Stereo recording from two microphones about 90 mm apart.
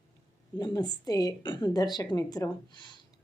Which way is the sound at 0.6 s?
50° left (ahead or behind).